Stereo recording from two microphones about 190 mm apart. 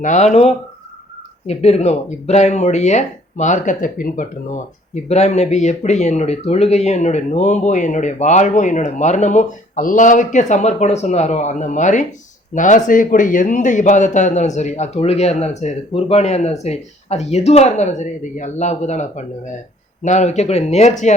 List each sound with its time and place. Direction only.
0.0 s speech: 40° left (ahead or behind)